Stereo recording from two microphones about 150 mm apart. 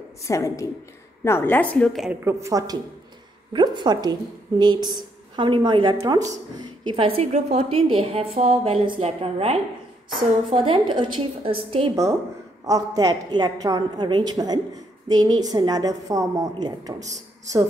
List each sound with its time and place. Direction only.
0.2 s a woman's voice: 20° left (ahead or behind)
2.2 s a woman's voice: 20° right (ahead or behind)
6.9 s a woman's voice: 40° right (ahead or behind)
11.9 s a woman's voice: 20° right (ahead or behind)